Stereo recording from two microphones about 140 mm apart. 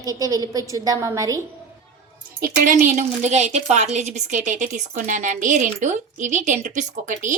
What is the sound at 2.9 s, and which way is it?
A woman's voice, 55° right (ahead or behind).